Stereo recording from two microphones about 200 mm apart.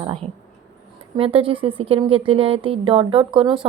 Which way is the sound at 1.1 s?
25° right (ahead or behind).